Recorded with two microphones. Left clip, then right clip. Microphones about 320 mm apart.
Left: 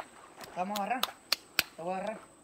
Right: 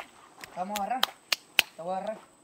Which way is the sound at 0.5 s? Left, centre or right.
Centre.